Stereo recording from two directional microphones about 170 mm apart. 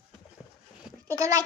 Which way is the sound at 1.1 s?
20° right (ahead or behind).